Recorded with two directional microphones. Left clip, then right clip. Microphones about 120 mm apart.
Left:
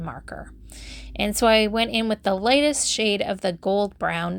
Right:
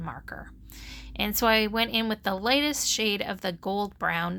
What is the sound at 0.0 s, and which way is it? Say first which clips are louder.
A woman's voice: left 3 dB; 25° left (ahead or behind).